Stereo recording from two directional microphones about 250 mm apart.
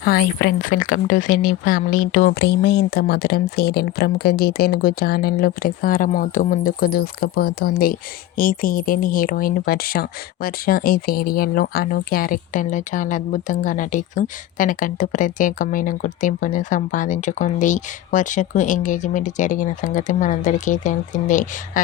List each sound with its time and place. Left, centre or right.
0.0 s speech: left